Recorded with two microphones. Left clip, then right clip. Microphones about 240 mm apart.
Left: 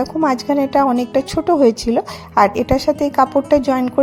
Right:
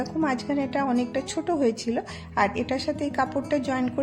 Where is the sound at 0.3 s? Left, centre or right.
Left.